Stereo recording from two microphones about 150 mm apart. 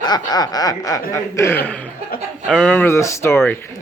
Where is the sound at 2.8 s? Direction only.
20° left (ahead or behind).